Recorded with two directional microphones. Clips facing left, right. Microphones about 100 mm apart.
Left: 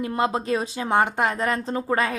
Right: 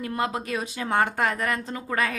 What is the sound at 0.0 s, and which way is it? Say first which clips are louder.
A woman's voice: left 4 dB; 25° left (ahead or behind).